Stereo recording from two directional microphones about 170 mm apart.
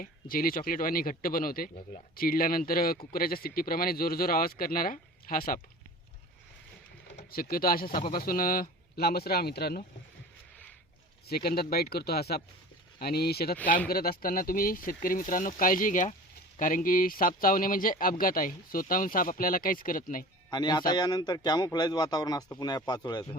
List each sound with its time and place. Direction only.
0.0 s speech: 55° left (ahead or behind)
7.2 s speech: 60° left (ahead or behind)
11.3 s speech: 65° left (ahead or behind)
20.5 s speech: 25° left (ahead or behind)